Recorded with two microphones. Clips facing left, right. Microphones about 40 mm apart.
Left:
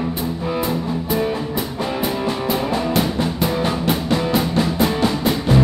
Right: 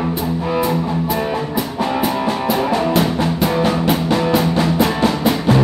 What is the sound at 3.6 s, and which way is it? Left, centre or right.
Music, centre.